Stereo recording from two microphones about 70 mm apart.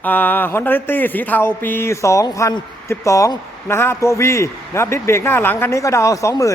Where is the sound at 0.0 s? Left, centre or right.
Left.